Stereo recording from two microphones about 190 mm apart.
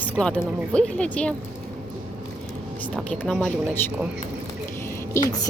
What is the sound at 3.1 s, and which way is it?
Speech, 10° left (ahead or behind).